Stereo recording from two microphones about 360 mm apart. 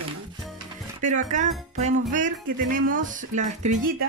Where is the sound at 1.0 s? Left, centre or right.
Right.